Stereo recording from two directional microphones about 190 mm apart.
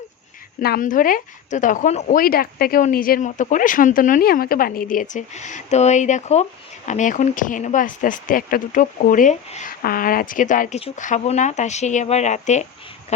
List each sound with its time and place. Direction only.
0.6 s speech: 50° left (ahead or behind)